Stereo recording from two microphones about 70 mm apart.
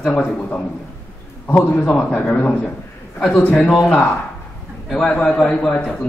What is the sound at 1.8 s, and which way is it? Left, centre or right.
Speech, centre.